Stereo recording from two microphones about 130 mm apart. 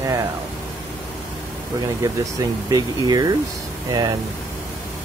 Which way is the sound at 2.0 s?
25° right (ahead or behind).